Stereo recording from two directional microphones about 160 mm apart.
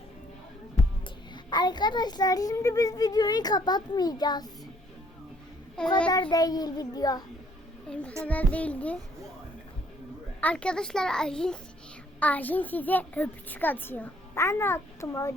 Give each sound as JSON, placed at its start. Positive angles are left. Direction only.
{"t": 1.5, "sound": "a child's voice", "side_deg": 25}
{"t": 6.1, "sound": "a child's voice", "side_deg": 25}
{"t": 7.9, "sound": "a child's voice", "side_deg": 5}
{"t": 10.4, "sound": "a child's voice", "side_deg": 5}